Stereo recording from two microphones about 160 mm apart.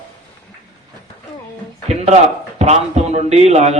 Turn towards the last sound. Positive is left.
turn(degrees=-45)  # may be behind; listen again after turning